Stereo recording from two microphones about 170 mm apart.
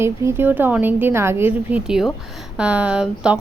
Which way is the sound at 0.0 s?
15° right (ahead or behind).